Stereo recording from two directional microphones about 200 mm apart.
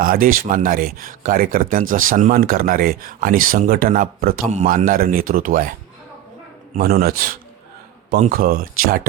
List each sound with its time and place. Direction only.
0.0 s speech: 45° right (ahead or behind)
6.7 s speech: 45° right (ahead or behind)